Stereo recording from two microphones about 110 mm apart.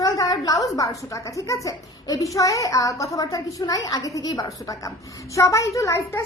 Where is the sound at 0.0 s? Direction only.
35° left (ahead or behind).